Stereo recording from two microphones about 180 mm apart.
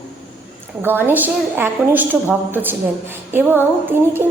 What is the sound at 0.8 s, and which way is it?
A woman's voice, 10° right (ahead or behind).